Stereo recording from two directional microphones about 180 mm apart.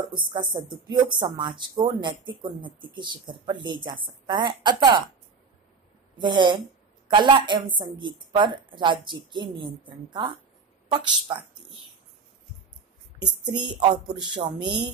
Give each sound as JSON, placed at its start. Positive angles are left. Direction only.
{"t": 0.3, "sound": "speech", "side_deg": -25}
{"t": 6.1, "sound": "speech", "side_deg": -25}
{"t": 7.6, "sound": "a woman's voice", "side_deg": -50}
{"t": 8.0, "sound": "speech", "side_deg": -25}
{"t": 13.5, "sound": "speech", "side_deg": -25}